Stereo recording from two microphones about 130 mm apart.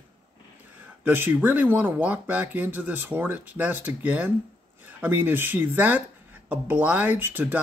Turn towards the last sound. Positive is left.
turn(degrees=-15)  # may be behind; listen again after turning